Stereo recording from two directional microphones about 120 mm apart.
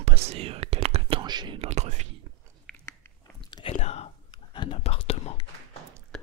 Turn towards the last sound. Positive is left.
turn(degrees=5)  # may be behind; listen again after turning